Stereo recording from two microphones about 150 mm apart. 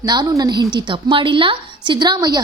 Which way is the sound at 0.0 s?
30° right (ahead or behind).